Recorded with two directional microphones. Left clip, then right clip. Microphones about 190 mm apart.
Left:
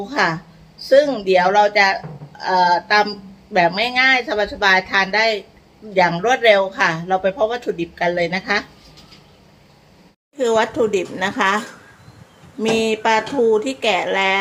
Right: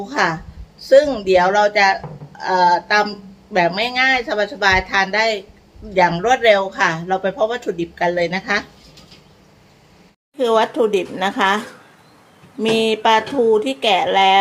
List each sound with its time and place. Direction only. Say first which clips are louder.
0.0 s speech: even; 5° right (ahead or behind)
10.3 s speech: right 1 dB; 10° right (ahead or behind)